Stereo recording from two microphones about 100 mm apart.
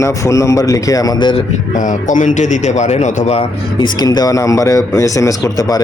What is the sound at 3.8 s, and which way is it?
Speech, 40° left (ahead or behind).